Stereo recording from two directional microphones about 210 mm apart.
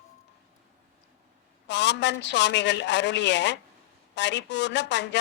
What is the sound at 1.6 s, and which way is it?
A woman's voice, 55° left (ahead or behind).